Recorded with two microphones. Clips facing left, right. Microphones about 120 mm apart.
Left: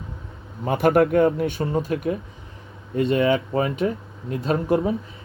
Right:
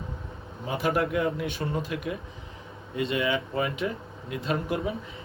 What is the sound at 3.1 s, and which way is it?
Speech, 30° left (ahead or behind).